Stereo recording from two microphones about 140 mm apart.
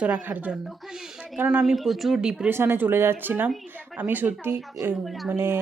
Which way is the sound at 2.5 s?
15° right (ahead or behind).